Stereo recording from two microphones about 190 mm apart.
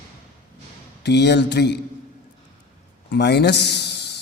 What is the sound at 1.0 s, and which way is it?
Speech, 60° left (ahead or behind).